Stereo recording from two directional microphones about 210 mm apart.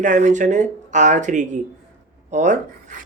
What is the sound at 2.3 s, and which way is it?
Rub, 35° right (ahead or behind).